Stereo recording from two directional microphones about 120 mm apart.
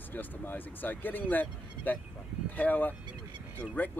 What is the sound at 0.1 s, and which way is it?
Speech, 15° left (ahead or behind).